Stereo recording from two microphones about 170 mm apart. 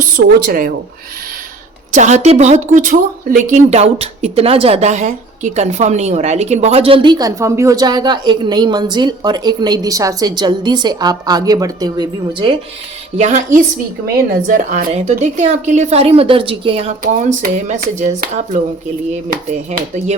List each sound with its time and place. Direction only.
0.2 s speech: 60° right (ahead or behind)
1.9 s speech: 45° right (ahead or behind); by 12.5 s 25° right (ahead or behind)
13.1 s a woman's voice: 40° right (ahead or behind)
14.4 s a woman's voice: 50° right (ahead or behind)
17.1 s speech: 45° right (ahead or behind)